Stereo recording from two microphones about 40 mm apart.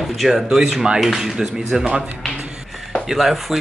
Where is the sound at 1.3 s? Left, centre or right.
Centre.